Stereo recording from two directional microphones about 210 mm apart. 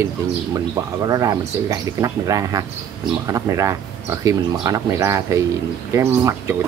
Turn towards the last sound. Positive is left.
turn(degrees=-15)  # may be behind; listen again after turning